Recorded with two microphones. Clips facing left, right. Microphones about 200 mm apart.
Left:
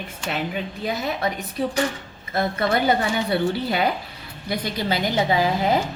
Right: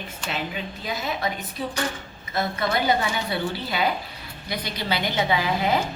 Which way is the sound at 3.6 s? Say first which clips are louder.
Left 3 dB; 55° left (ahead or behind).